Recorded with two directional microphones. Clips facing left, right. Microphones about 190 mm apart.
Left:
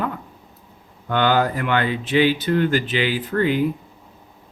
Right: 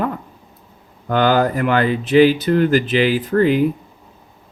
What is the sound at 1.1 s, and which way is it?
Speech, 40° right (ahead or behind).